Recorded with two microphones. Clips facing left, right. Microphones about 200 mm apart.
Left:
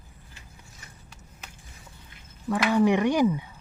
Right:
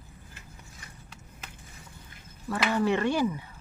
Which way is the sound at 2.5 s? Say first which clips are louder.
Left 4 dB; 15° left (ahead or behind).